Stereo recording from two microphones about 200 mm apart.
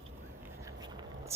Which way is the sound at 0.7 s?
20° right (ahead or behind).